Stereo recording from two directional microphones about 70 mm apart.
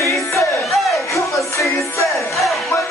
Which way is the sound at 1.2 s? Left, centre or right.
Left.